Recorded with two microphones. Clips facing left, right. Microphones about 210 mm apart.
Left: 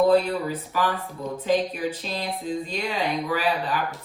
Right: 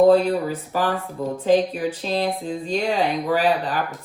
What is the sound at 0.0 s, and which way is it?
Speech, 45° right (ahead or behind).